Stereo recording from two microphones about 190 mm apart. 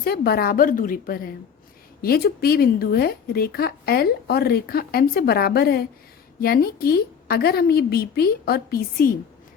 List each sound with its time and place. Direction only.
0.0 s speech: 55° left (ahead or behind)